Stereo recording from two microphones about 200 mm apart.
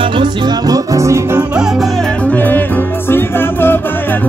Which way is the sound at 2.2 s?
10° left (ahead or behind).